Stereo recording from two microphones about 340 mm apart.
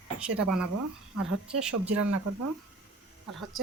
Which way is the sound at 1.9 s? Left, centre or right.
Right.